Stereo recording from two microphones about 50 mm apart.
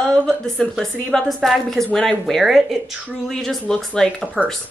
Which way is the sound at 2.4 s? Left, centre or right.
Centre.